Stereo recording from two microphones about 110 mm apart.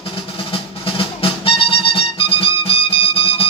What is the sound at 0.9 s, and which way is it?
Music, 55° left (ahead or behind).